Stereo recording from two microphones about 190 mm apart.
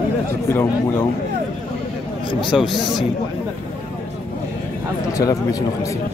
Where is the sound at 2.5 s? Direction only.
Centre (ahead or behind).